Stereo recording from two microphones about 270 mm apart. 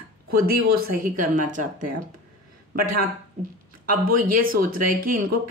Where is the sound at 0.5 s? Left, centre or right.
Right.